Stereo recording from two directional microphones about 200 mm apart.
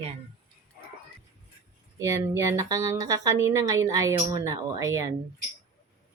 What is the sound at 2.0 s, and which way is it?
A woman's voice, 15° right (ahead or behind).